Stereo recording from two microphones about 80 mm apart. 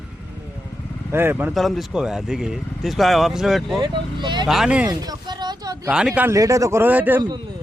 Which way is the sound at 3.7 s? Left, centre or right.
Right.